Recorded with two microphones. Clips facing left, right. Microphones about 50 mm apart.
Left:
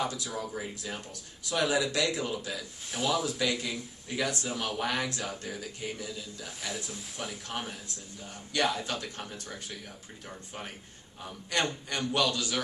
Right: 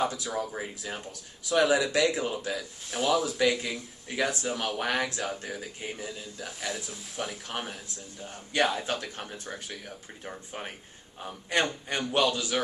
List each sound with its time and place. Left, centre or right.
0.1 s speech: centre
2.0 s a man's voice: centre
2.4 s speech: centre
4.2 s speech: centre
4.5 s speech: centre
5.6 s a man's voice: right
6.4 s speech: centre
8.6 s a man's voice: right
8.9 s speech: centre
10.2 s a man's voice: right
12.4 s a man's voice: centre